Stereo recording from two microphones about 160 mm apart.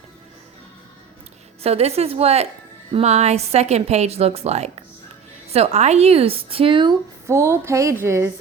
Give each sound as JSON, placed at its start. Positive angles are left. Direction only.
{"t": 1.6, "sound": "a woman's voice", "side_deg": -40}
{"t": 7.3, "sound": "speech", "side_deg": -15}